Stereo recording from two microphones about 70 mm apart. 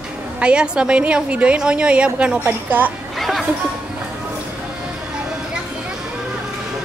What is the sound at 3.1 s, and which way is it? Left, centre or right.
Music, centre.